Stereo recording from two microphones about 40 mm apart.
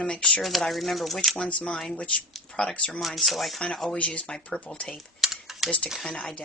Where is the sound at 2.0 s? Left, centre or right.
Left.